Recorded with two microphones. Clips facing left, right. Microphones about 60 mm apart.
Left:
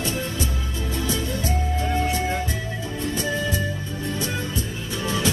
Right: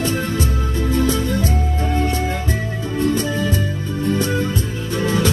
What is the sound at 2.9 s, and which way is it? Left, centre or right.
Music, right.